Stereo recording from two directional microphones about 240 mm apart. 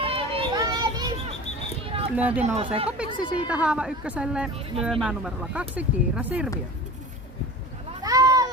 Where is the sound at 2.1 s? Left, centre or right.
Centre.